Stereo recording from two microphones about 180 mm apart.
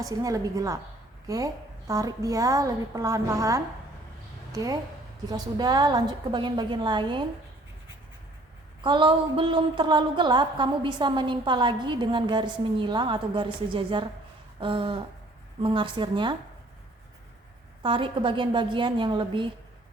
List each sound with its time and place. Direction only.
0.0 s a woman's voice: 20° right (ahead or behind)
8.8 s a woman's voice: 25° right (ahead or behind)
17.8 s a woman's voice: 30° right (ahead or behind)